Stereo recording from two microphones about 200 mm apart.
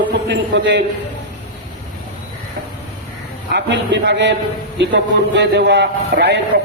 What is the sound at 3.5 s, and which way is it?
A man's voice, 60° right (ahead or behind).